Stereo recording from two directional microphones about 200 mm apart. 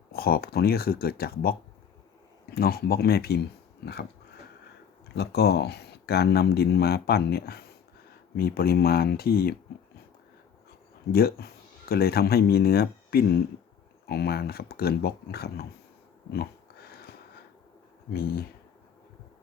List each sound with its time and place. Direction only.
0.1 s speech: 50° left (ahead or behind)
5.1 s speech: 55° left (ahead or behind)
11.1 s speech: 50° left (ahead or behind)
16.3 s a sound: 50° left (ahead or behind)
18.1 s speech: 50° left (ahead or behind)